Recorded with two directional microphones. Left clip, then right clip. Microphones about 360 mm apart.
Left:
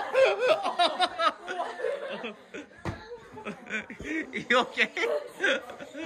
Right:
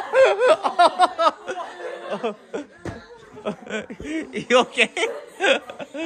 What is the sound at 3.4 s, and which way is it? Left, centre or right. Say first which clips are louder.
Speech: right 7 dB; centre.